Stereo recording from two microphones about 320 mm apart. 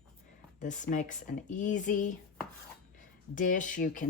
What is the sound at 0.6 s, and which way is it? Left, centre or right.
Speech, left.